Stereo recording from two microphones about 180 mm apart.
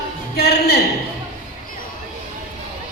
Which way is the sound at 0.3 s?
60° left (ahead or behind).